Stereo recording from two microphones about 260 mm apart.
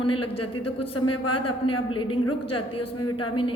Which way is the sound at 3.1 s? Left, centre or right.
Centre.